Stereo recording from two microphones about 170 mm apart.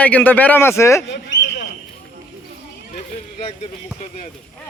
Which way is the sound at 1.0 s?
90° left.